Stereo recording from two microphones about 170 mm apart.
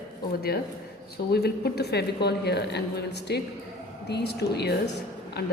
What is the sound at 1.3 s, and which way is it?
A woman's voice, 70° left (ahead or behind).